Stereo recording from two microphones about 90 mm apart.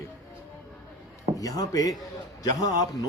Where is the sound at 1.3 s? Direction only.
45° left (ahead or behind).